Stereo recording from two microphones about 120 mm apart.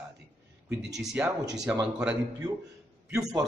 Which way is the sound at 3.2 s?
30° right (ahead or behind).